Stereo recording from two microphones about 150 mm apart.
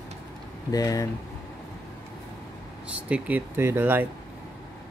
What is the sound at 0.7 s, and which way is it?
Speech, 25° left (ahead or behind).